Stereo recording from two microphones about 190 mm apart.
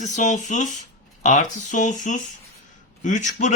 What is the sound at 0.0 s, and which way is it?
Speech, 40° left (ahead or behind).